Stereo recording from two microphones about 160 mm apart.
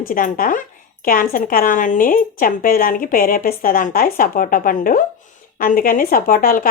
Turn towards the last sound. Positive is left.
turn(degrees=60)  # may be behind; listen again after turning